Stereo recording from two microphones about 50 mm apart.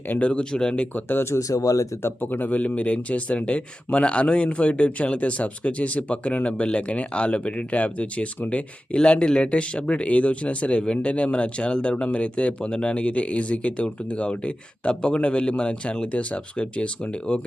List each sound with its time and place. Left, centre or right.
0.2 s speech: left
1.2 s speech: left
2.0 s speech: left